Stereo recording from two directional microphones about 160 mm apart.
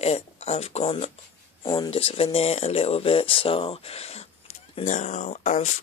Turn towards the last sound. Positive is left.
turn(degrees=50)  # may be behind; listen again after turning